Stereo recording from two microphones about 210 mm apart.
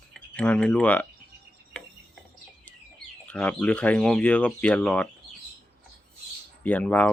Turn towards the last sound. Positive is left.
turn(degrees=5)  # may be behind; listen again after turning